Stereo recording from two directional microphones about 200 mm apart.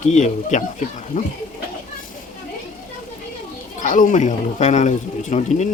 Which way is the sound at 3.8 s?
40° left (ahead or behind).